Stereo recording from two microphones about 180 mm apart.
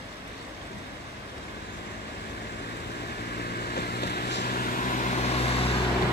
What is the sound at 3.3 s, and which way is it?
Vehicle, 60° left (ahead or behind).